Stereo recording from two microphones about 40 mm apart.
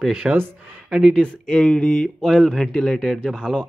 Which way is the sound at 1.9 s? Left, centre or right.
Centre.